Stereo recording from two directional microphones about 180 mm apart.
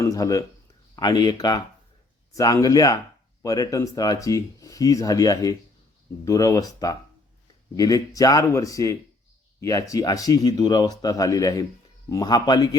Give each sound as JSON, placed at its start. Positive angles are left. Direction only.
{"t": 0.0, "sound": "speech", "side_deg": 20}